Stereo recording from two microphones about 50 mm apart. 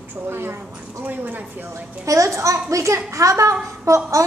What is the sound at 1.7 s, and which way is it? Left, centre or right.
A child's voice, right.